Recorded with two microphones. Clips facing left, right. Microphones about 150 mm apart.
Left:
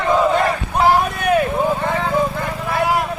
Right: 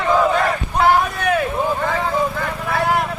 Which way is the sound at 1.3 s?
20° left (ahead or behind).